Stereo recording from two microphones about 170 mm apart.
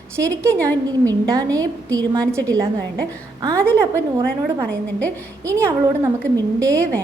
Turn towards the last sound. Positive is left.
turn(degrees=-20)  # may be behind; listen again after turning